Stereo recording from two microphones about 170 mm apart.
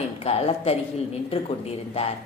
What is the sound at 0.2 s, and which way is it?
A woman's voice, 35° left (ahead or behind).